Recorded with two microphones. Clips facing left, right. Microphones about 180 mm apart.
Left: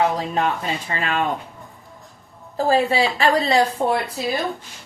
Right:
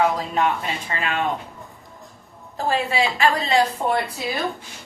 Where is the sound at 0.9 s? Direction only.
40° left (ahead or behind).